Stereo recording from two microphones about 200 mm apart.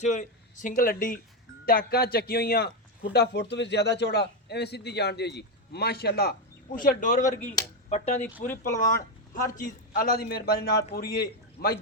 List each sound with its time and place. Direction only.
0.0 s a man's voice: 35° left (ahead or behind)